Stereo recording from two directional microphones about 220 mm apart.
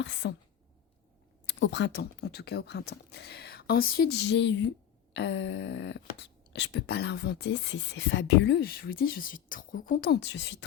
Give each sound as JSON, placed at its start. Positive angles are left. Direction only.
{"t": 0.0, "sound": "a woman's voice", "side_deg": 55}
{"t": 1.5, "sound": "speech", "side_deg": 55}